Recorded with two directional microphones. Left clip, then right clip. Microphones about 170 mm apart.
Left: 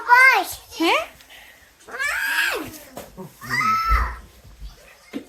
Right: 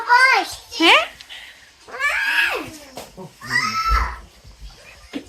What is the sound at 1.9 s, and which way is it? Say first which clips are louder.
Cat: right 3 dB; 75° left (ahead or behind).